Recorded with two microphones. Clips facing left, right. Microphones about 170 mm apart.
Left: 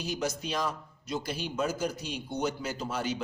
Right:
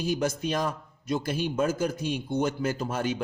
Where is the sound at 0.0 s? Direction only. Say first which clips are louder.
Right 5 dB; 50° right (ahead or behind).